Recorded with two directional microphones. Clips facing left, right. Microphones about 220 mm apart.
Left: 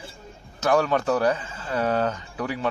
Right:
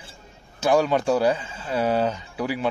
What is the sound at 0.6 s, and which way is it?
A man's voice, 15° right (ahead or behind).